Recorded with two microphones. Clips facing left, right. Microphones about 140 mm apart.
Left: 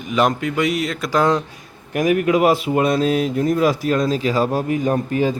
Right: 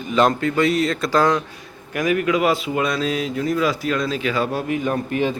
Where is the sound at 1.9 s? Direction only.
45° left (ahead or behind).